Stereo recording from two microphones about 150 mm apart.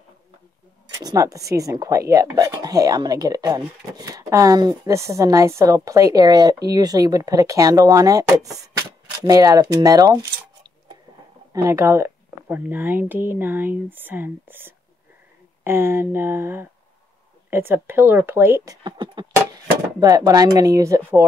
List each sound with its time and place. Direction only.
0.8 s speech: 25° right (ahead or behind)
11.5 s speech: 20° right (ahead or behind)
18.9 s a sound: 30° right (ahead or behind)
20.0 s speech: 25° right (ahead or behind)